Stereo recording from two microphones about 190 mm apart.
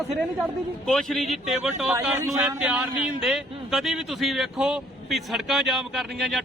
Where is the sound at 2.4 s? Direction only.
5° right (ahead or behind).